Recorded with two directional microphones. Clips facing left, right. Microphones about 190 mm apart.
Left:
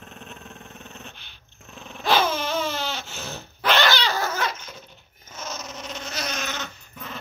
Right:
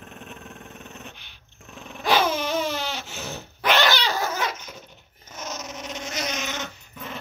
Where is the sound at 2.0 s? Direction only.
10° right (ahead or behind).